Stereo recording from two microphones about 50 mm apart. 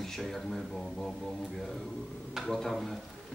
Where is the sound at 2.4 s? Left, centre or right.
Centre.